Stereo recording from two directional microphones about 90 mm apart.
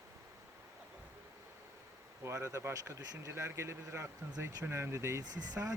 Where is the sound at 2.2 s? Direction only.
35° right (ahead or behind).